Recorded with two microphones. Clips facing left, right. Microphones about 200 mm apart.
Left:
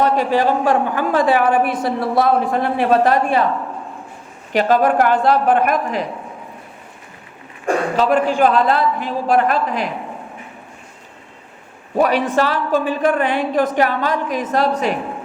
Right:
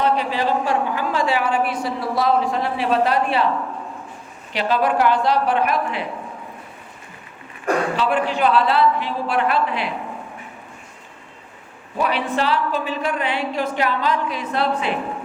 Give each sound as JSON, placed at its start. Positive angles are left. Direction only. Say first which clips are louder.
{"t": 0.0, "sound": "speech", "louder": "left 4 dB", "side_deg": 45}
{"t": 4.5, "sound": "speech", "louder": "left 5 dB", "side_deg": 45}
{"t": 7.9, "sound": "speech", "louder": "left 5 dB", "side_deg": 40}
{"t": 11.9, "sound": "a woman's voice", "louder": "left 6 dB", "side_deg": 45}